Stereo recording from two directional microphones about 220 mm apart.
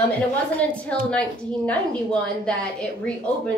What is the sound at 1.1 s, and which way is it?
A woman's voice, 5° left (ahead or behind).